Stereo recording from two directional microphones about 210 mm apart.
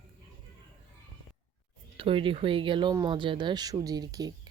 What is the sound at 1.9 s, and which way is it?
Speech, 25° right (ahead or behind).